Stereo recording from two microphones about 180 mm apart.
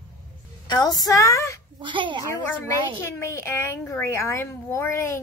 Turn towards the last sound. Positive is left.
turn(degrees=15)  # may be behind; listen again after turning